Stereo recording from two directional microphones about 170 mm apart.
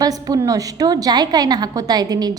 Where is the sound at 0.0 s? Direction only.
20° right (ahead or behind).